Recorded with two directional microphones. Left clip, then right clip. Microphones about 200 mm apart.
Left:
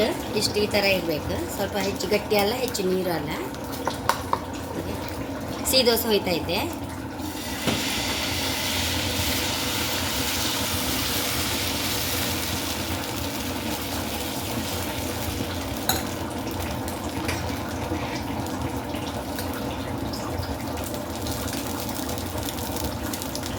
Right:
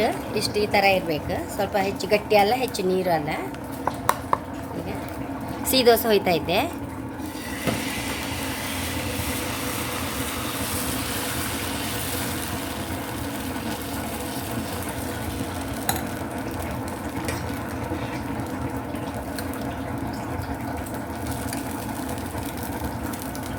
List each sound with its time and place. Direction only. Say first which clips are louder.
0.0 s a woman's voice: even; 45° right (ahead or behind)
5.7 s a woman's voice: right 3 dB; 45° right (ahead or behind)